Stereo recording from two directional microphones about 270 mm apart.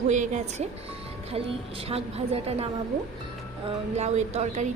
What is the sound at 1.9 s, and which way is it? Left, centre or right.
Speech, right.